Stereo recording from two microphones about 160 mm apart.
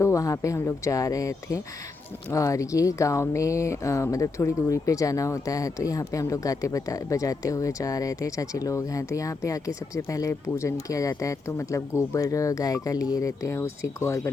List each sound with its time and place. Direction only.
0.0 s speech: 20° left (ahead or behind)